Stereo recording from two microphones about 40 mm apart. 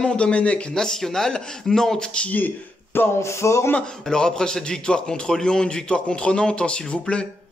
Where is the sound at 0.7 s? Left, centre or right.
Centre.